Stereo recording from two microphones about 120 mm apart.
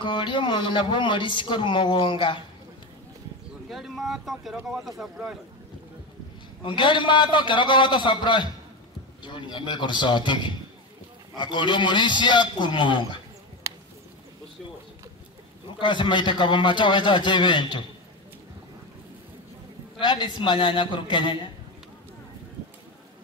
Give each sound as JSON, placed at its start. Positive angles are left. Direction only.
{"t": 0.0, "sound": "a woman's voice", "side_deg": 40}
{"t": 3.6, "sound": "speech", "side_deg": 0}
{"t": 6.6, "sound": "a man's voice", "side_deg": 45}
{"t": 15.8, "sound": "a man's voice", "side_deg": 40}
{"t": 20.0, "sound": "a man's voice", "side_deg": 40}